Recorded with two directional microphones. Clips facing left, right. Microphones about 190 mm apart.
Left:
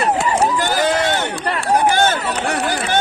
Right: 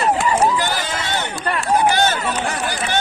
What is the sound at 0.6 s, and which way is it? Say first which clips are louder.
Run: left 6 dB; 50° left (ahead or behind).